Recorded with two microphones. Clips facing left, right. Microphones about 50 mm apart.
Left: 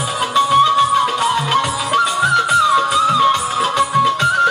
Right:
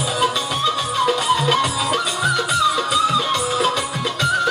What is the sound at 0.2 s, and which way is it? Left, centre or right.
Music, left.